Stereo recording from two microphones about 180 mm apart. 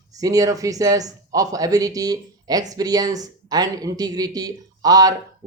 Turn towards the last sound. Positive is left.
turn(degrees=-20)  # may be behind; listen again after turning